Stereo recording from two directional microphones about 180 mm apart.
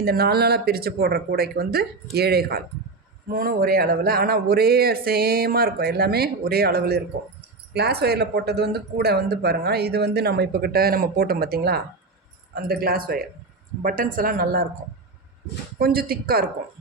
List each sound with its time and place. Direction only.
0.0 s a woman's voice: 60° right (ahead or behind)
15.8 s speech: 55° right (ahead or behind)